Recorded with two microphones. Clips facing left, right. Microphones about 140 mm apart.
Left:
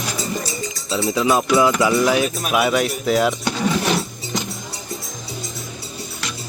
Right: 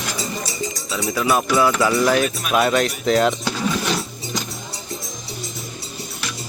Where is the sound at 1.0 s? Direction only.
20° left (ahead or behind).